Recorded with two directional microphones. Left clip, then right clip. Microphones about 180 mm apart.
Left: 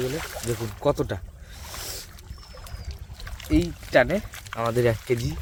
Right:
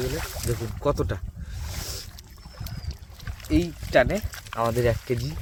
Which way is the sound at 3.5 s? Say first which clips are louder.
Left 1 dB; 5° left (ahead or behind).